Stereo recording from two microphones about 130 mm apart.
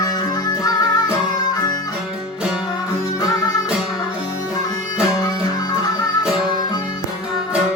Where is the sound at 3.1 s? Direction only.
30° left (ahead or behind).